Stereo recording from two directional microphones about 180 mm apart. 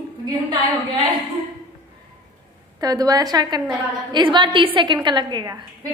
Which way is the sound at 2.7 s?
20° right (ahead or behind).